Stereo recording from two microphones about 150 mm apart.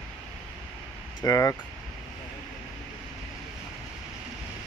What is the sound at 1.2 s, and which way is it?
Speech, 20° left (ahead or behind).